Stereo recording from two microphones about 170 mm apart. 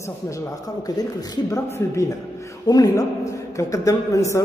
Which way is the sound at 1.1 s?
20° left (ahead or behind).